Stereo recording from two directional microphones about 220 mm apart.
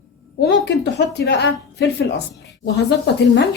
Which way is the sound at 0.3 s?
50° left (ahead or behind).